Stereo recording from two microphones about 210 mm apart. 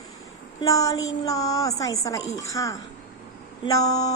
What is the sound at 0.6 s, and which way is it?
A woman's voice, 15° left (ahead or behind).